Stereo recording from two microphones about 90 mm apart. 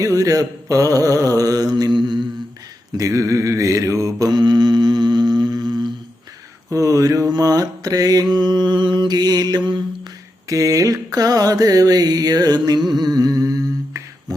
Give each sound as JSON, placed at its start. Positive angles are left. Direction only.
{"t": 0.0, "sound": "mantra", "side_deg": -40}
{"t": 3.0, "sound": "mantra", "side_deg": -35}
{"t": 4.4, "sound": "humming", "side_deg": -55}
{"t": 6.7, "sound": "mantra", "side_deg": -40}
{"t": 10.5, "sound": "mantra", "side_deg": -40}
{"t": 12.9, "sound": "humming", "side_deg": -50}
{"t": 14.3, "sound": "a sound", "side_deg": -40}